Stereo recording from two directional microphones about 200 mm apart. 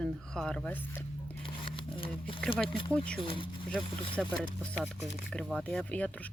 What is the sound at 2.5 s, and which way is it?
Speech, 25° left (ahead or behind).